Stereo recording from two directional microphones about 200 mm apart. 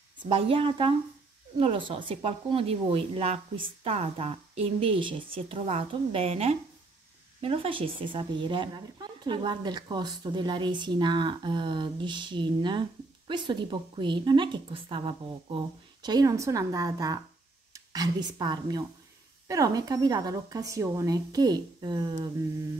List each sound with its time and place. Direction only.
0.2 s speech: 30° right (ahead or behind)